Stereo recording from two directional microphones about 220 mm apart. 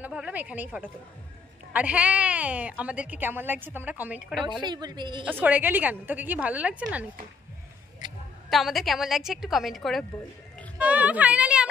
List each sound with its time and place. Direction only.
0.0 s speech: 5° right (ahead or behind)
1.7 s speech: 5° right (ahead or behind)
4.4 s a woman's voice: 20° right (ahead or behind)
5.4 s speech: 10° right (ahead or behind)
8.5 s a woman's voice: centre (ahead or behind)